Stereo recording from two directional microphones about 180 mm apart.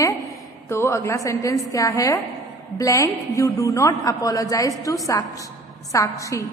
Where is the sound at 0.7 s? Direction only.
15° left (ahead or behind).